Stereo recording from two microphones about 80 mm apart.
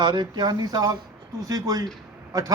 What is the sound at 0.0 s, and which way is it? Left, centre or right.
A man's voice, right.